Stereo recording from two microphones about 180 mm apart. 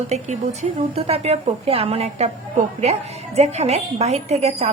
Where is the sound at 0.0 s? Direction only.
40° right (ahead or behind).